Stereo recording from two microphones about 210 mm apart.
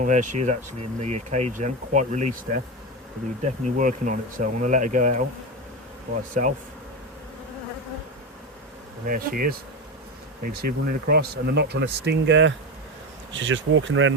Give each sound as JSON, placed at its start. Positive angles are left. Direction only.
{"t": 0.0, "sound": "speech", "side_deg": -35}
{"t": 3.8, "sound": "speech", "side_deg": -40}
{"t": 6.4, "sound": "speech", "side_deg": -35}
{"t": 9.0, "sound": "speech", "side_deg": -45}